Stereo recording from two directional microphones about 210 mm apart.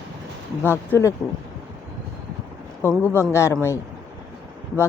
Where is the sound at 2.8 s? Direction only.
10° left (ahead or behind).